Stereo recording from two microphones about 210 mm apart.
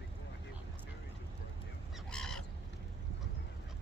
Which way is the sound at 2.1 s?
5° left (ahead or behind).